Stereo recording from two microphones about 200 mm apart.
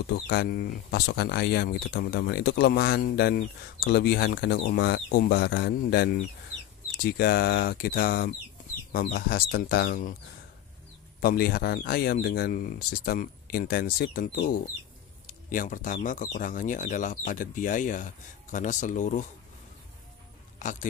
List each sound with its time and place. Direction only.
0.0 s speech: 55° left (ahead or behind)
11.1 s speech: 50° left (ahead or behind)